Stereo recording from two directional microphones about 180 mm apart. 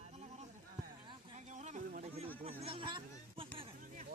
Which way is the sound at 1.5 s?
45° right (ahead or behind).